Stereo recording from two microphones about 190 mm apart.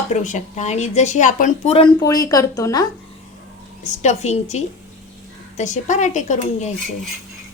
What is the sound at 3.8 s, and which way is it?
A woman's voice, 40° left (ahead or behind).